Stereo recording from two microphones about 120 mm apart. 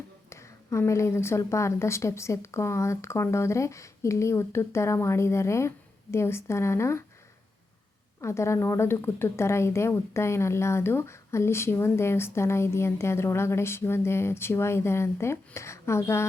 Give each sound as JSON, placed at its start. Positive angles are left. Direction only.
{"t": 0.3, "sound": "a woman's voice", "side_deg": 25}
{"t": 8.2, "sound": "a woman's voice", "side_deg": 25}